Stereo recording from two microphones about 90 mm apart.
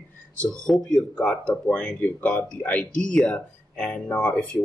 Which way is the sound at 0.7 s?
5° left (ahead or behind).